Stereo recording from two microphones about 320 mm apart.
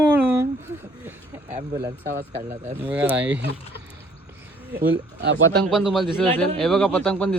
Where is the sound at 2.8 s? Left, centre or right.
Centre.